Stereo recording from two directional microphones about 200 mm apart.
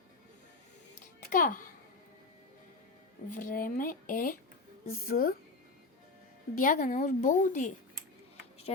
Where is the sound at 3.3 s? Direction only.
45° left (ahead or behind).